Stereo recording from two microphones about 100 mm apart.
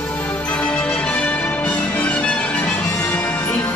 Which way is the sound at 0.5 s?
10° left (ahead or behind).